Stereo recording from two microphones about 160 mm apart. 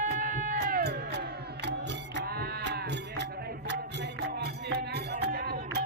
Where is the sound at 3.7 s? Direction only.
90° right.